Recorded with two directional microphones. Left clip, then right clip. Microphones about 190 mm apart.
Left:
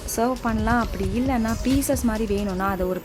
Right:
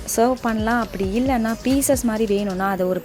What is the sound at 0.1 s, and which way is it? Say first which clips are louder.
A woman's voice: right 5 dB; 15° right (ahead or behind).